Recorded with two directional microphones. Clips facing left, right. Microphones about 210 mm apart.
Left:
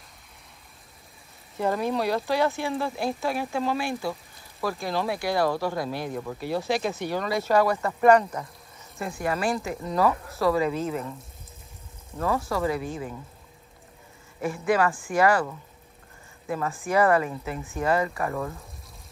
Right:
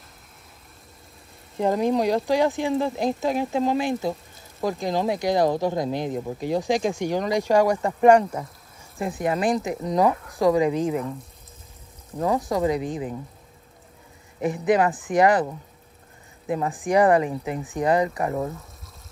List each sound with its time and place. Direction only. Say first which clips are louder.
1.6 s speech: right 4 dB; 15° right (ahead or behind)
12.2 s speech: right 4 dB; 15° right (ahead or behind)
14.4 s speech: right 3 dB; 20° right (ahead or behind)